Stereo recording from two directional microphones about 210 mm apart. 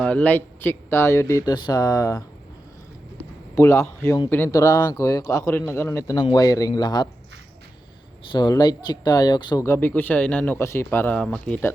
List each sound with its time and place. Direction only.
0.0 s speech: 5° left (ahead or behind)
3.5 s speech: 15° left (ahead or behind)
8.3 s speech: 20° left (ahead or behind)